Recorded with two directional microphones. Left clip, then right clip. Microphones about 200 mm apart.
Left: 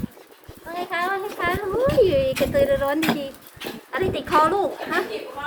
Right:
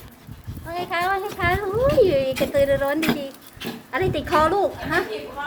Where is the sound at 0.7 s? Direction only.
15° right (ahead or behind).